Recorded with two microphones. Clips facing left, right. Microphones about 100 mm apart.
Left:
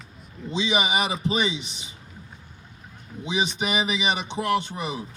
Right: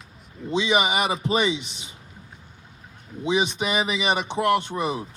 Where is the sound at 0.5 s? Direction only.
55° right (ahead or behind).